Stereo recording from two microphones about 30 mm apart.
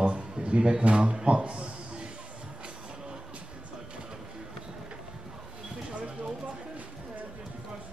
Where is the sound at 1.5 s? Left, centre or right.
Right.